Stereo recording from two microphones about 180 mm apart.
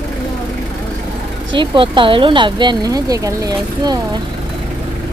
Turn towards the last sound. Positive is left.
turn(degrees=-20)  # may be behind; listen again after turning